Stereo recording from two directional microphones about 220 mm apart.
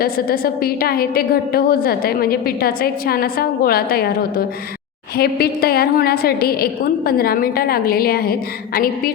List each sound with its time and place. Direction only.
0.0 s a woman's voice: 45° left (ahead or behind)